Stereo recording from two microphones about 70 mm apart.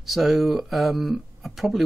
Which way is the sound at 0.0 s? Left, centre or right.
Centre.